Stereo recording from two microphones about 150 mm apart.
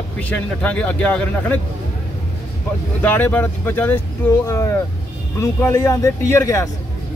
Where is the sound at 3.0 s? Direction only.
10° left (ahead or behind).